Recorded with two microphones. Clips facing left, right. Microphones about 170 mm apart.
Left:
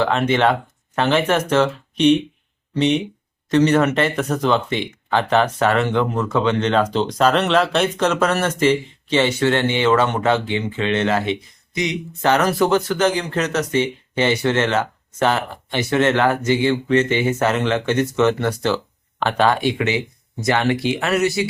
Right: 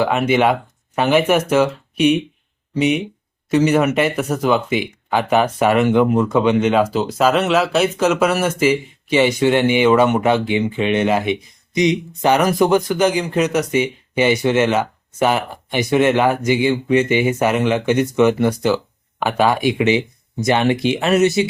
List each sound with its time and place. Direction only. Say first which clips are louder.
0.0 s speech: right 2 dB; 10° right (ahead or behind)